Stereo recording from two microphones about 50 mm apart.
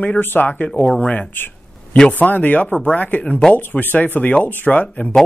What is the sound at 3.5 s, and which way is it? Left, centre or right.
Speech, left.